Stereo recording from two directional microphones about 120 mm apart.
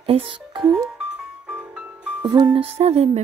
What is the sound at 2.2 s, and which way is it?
Music, 35° right (ahead or behind).